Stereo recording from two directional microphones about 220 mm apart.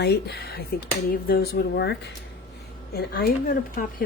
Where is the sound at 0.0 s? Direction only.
50° left (ahead or behind).